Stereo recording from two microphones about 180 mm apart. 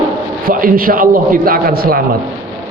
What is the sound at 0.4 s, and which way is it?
A man's voice, 50° right (ahead or behind).